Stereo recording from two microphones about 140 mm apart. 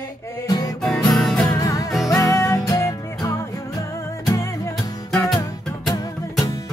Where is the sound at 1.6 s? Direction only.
25° left (ahead or behind).